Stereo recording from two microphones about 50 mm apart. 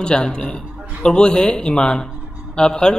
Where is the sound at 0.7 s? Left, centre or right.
Right.